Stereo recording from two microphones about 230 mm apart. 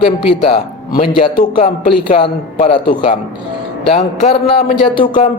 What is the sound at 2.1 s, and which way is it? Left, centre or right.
Speech, left.